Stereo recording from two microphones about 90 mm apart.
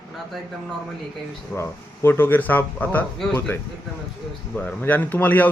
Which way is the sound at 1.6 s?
25° left (ahead or behind).